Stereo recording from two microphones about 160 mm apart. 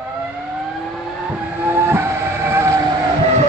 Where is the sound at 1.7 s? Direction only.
15° right (ahead or behind).